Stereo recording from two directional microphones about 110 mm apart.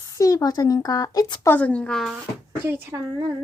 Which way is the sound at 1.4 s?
15° left (ahead or behind).